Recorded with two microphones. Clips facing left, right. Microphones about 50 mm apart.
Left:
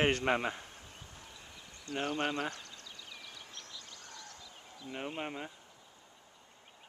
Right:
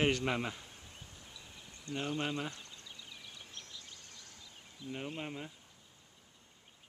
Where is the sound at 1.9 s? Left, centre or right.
Left.